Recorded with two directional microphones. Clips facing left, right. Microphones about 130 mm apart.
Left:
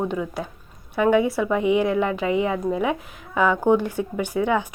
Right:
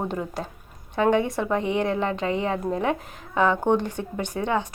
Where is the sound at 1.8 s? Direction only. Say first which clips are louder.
Left 3 dB; 30° right (ahead or behind).